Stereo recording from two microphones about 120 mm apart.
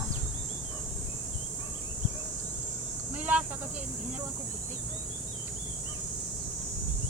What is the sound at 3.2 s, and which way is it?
Cricket, 10° right (ahead or behind).